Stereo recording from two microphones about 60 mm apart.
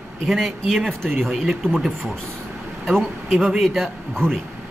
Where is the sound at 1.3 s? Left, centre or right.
Centre.